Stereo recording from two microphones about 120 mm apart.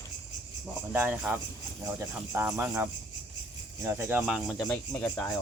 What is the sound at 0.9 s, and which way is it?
Speech, 10° right (ahead or behind).